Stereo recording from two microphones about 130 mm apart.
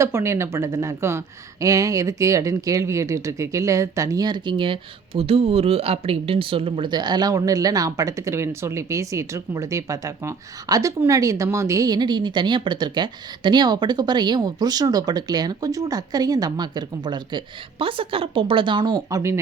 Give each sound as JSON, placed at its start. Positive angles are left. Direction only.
{"t": 0.0, "sound": "speech", "side_deg": -20}